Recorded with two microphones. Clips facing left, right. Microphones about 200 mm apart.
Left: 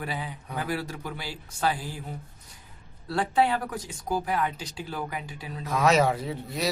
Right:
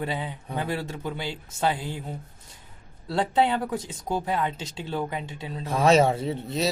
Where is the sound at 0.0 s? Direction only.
25° right (ahead or behind).